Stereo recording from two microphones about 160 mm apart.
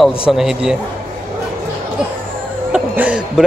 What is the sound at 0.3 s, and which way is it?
Speech, centre (ahead or behind).